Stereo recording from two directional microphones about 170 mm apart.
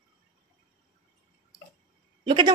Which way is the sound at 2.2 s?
30° right (ahead or behind).